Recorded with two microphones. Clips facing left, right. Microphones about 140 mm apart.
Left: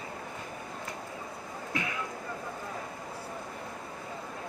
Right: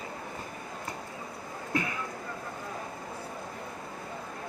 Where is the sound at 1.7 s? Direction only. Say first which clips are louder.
Right 4 dB; 45° right (ahead or behind).